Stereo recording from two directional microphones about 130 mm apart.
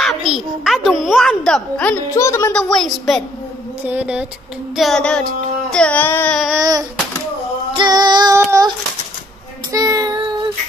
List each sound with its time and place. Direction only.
0.0 s a sound: 5° right (ahead or behind)
2.1 s speech: 20° left (ahead or behind)
2.5 s a woman's voice: 5° left (ahead or behind)
3.8 s speech: 10° right (ahead or behind)
4.7 s a woman's voice: 5° left (ahead or behind)
5.7 s carnatic music: 10° left (ahead or behind)
6.3 s a woman's voice: centre (ahead or behind)
6.6 s a sound: 30° right (ahead or behind)
7.7 s female singing: 35° right (ahead or behind)
9.7 s child singing: 25° right (ahead or behind)